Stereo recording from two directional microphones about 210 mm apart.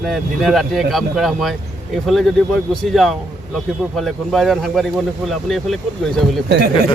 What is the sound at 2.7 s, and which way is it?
Speech, centre (ahead or behind).